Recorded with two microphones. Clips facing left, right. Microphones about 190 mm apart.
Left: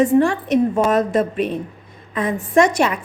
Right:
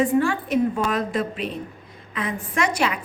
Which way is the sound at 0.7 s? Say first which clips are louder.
Left 7 dB; 45° left (ahead or behind).